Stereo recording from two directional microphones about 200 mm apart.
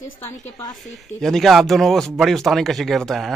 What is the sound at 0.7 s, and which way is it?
Speech, centre (ahead or behind).